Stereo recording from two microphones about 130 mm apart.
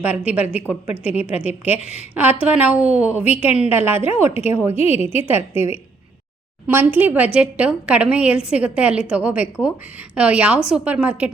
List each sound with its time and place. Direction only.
0.3 s a woman's voice: 10° right (ahead or behind)